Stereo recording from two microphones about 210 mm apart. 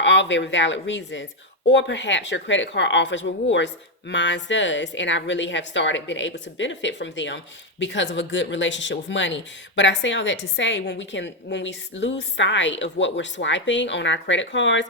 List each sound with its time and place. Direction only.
0.0 s a woman's voice: 60° left (ahead or behind)